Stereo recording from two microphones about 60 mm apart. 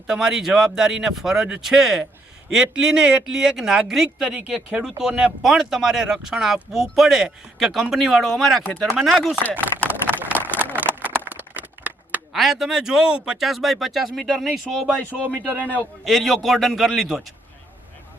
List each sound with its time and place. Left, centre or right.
0.1 s speech: centre
10.2 s a sound: right
12.3 s speech: centre
13.4 s speech: centre
15.3 s speech: right
16.0 s speech: centre